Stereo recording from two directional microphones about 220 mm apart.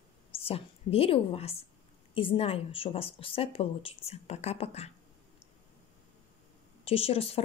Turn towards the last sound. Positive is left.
turn(degrees=25)  # may be behind; listen again after turning